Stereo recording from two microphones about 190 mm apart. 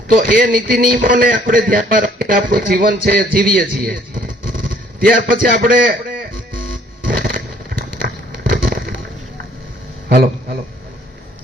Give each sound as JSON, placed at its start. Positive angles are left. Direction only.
{"t": 0.1, "sound": "a man's voice", "side_deg": -45}
{"t": 4.4, "sound": "a sound", "side_deg": -45}
{"t": 6.7, "sound": "fireworks", "side_deg": -50}
{"t": 10.1, "sound": "a man's voice", "side_deg": -55}